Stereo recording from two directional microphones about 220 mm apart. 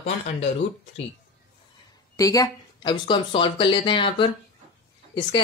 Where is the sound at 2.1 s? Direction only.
15° left (ahead or behind).